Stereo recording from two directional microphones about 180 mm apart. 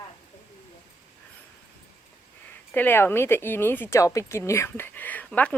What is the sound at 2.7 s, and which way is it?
Speech, 10° left (ahead or behind).